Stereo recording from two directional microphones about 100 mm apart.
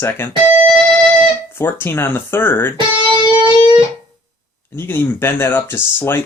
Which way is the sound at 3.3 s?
55° right (ahead or behind).